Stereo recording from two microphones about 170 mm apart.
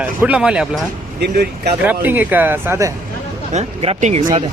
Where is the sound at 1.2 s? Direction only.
70° right (ahead or behind).